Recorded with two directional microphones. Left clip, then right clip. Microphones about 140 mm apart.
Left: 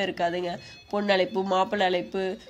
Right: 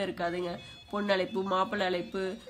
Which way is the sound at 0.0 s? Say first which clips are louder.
Left 6 dB; 15° left (ahead or behind).